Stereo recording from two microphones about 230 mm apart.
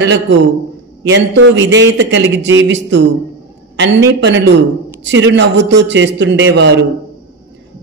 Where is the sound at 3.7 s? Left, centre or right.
Right.